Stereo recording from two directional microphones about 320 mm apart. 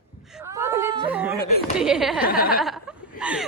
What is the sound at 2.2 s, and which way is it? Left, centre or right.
Speech, left.